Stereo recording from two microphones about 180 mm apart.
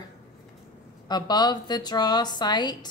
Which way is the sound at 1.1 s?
25° left (ahead or behind).